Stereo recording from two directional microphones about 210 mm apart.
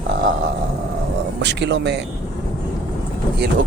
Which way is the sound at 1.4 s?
55° right (ahead or behind).